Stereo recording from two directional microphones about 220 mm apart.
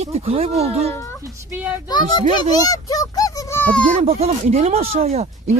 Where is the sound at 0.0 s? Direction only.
30° right (ahead or behind).